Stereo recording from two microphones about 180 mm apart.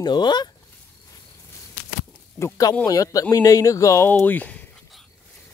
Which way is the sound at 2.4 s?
20° left (ahead or behind).